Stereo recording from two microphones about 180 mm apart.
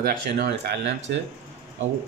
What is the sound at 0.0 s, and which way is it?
Speech, 60° right (ahead or behind).